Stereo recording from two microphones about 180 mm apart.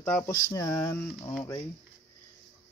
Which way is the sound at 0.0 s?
15° left (ahead or behind).